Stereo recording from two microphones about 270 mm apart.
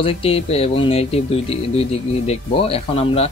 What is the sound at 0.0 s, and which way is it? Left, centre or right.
Speech, left.